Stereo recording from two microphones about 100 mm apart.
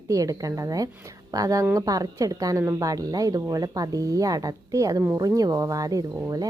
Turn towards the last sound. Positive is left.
turn(degrees=-35)  # may be behind; listen again after turning